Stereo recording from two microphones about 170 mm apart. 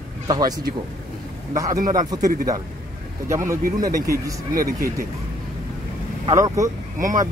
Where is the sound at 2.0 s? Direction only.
25° right (ahead or behind).